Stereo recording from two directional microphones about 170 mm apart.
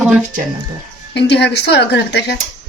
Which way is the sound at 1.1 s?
90° left.